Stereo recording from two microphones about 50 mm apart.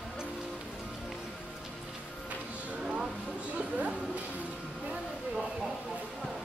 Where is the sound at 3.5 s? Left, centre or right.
Right.